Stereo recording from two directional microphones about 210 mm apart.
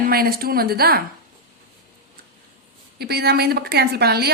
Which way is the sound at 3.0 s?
50° right (ahead or behind).